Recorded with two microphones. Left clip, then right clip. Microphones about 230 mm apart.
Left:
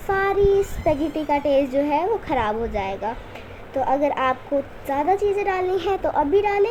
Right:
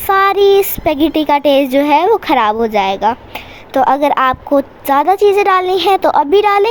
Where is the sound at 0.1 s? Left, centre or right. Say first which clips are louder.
Right 10 dB; right.